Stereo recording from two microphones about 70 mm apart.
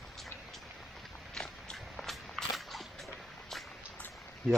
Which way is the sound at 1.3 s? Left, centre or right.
Centre.